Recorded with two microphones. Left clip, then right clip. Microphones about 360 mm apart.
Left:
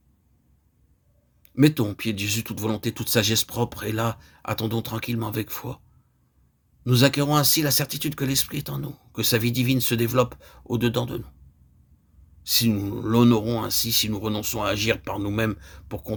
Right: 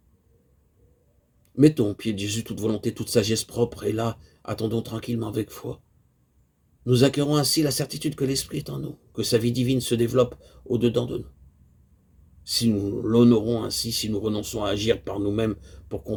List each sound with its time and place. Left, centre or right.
1.5 s speech: left
6.8 s speech: left
12.4 s speech: left